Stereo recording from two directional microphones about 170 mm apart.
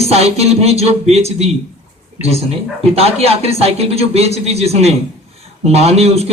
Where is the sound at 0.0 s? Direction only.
40° right (ahead or behind).